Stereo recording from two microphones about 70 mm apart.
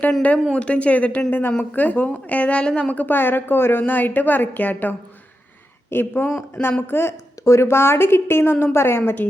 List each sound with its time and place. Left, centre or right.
0.5 s a woman's voice: centre; by 9.2 s left